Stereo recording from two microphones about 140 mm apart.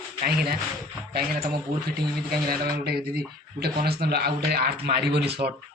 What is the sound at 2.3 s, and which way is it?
Speech, 90° right.